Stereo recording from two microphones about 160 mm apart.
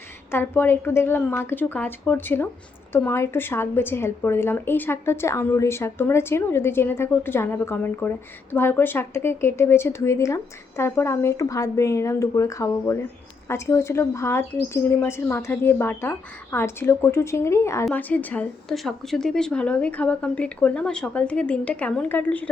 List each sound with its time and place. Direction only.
0.3 s a woman's voice: 15° left (ahead or behind)